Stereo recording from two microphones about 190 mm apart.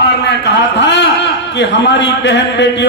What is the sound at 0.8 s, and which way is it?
A man's voice, 65° left (ahead or behind).